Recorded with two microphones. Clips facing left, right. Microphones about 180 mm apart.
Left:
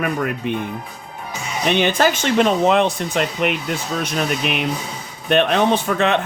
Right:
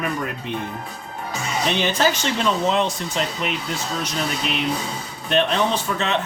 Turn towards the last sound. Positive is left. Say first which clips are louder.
# left 5 dB
turn(degrees=60)  # may be behind; listen again after turning